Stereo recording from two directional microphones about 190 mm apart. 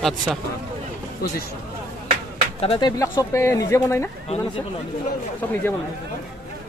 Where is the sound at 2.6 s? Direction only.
30° left (ahead or behind).